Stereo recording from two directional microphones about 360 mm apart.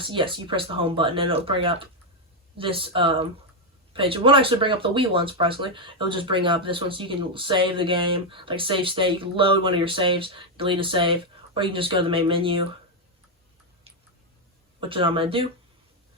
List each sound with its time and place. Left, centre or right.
0.0 s speech: centre
13.9 s a sound: centre
14.8 s speech: centre